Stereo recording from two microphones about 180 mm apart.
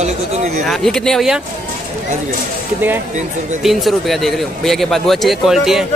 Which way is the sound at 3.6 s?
Centre (ahead or behind).